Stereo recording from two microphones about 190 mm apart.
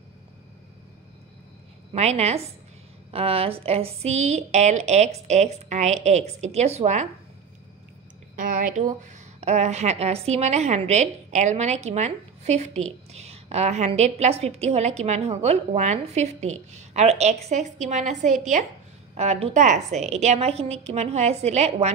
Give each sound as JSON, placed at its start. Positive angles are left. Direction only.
{"t": 2.0, "sound": "a woman's voice", "side_deg": -35}
{"t": 8.4, "sound": "a woman's voice", "side_deg": -45}